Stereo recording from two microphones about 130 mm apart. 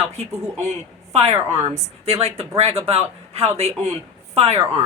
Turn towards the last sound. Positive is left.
turn(degrees=-55)  # may be behind; listen again after turning